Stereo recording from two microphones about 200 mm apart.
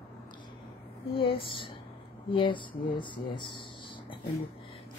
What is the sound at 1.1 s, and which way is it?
A woman's voice, 25° left (ahead or behind).